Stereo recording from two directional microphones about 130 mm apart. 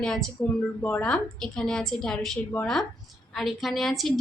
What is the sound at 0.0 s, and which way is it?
A woman's voice, 5° left (ahead or behind).